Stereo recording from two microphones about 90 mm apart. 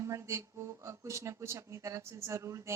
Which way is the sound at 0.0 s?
35° right (ahead or behind).